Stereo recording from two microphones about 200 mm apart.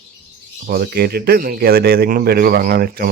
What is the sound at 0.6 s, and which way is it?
Speech, 50° right (ahead or behind).